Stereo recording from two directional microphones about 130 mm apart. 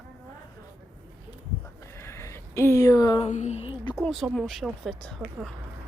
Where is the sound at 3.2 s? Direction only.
60° left (ahead or behind).